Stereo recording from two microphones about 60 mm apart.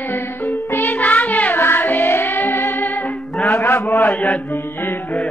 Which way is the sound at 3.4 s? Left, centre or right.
Left.